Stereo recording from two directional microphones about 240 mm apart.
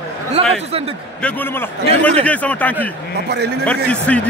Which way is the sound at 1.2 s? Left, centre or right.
Centre.